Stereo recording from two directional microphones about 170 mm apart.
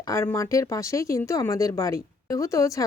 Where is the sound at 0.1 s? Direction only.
15° left (ahead or behind).